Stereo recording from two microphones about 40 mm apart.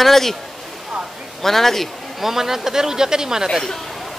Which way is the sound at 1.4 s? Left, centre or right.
Centre.